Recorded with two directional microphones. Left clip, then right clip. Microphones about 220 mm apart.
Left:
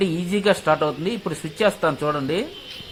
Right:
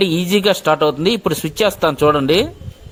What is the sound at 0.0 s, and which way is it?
Speech, 45° right (ahead or behind).